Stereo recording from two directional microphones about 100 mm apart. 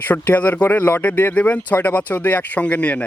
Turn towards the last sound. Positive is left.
turn(degrees=15)  # may be behind; listen again after turning